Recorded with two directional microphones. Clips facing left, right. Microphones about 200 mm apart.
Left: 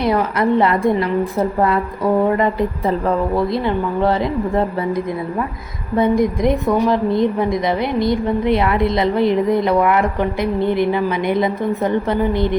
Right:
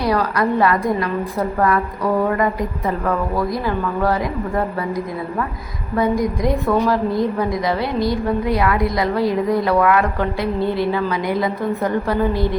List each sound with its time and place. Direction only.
0.0 s a woman's voice: 20° left (ahead or behind)
6.0 s a woman's voice: 25° left (ahead or behind)